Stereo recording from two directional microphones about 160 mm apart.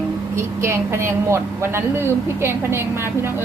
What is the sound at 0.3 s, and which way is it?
A woman's voice, 15° right (ahead or behind).